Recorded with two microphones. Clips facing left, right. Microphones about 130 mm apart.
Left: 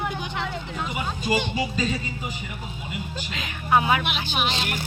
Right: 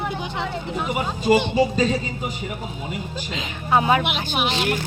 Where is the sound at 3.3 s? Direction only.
25° right (ahead or behind).